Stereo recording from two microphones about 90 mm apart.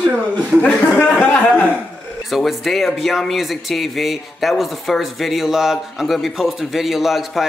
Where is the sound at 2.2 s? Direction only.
Centre (ahead or behind).